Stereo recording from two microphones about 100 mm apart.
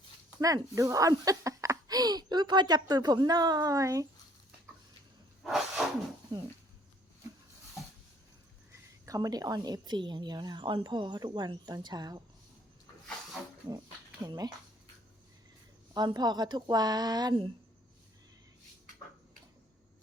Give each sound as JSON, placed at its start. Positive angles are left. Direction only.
{"t": 0.3, "sound": "speech", "side_deg": -35}
{"t": 5.4, "sound": "sneeze", "side_deg": 0}
{"t": 6.3, "sound": "speech", "side_deg": -40}
{"t": 9.0, "sound": "a woman's voice", "side_deg": -35}
{"t": 14.3, "sound": "speech", "side_deg": -35}
{"t": 16.0, "sound": "a woman's voice", "side_deg": -45}